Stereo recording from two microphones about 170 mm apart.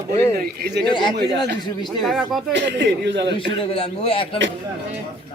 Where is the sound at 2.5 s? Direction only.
90° right.